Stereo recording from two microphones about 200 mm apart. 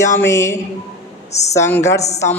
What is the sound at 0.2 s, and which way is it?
Speech, 15° left (ahead or behind).